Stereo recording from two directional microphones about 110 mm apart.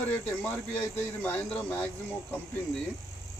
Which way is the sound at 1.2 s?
20° left (ahead or behind).